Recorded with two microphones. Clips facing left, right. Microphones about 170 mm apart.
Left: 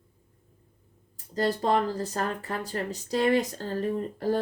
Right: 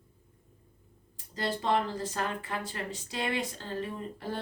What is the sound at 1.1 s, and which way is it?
Speech, 40° left (ahead or behind).